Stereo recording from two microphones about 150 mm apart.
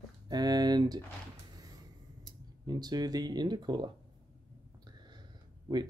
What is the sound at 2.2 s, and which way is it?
Speech, 25° right (ahead or behind).